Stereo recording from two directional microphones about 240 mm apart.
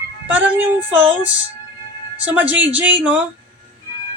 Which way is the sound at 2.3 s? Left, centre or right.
Centre.